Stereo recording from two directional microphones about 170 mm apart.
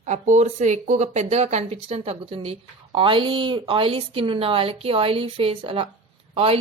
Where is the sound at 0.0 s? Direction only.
45° right (ahead or behind).